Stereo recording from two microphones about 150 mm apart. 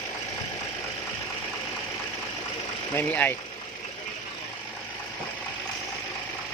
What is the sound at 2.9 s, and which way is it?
Speech, 10° left (ahead or behind).